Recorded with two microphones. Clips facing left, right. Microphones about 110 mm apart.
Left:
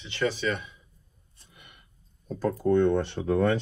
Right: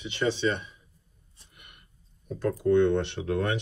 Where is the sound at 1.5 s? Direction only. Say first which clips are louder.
Left 1 dB; 55° right (ahead or behind).